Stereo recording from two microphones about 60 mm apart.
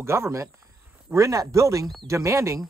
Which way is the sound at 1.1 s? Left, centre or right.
Right.